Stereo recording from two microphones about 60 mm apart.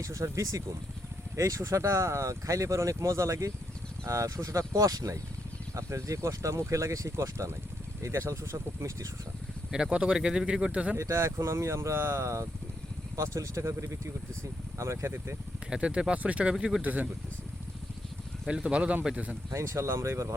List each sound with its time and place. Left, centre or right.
0.0 s speech: right
5.7 s speech: right
9.7 s speech: centre
10.9 s speech: right
15.7 s speech: centre
18.4 s speech: centre
19.5 s speech: right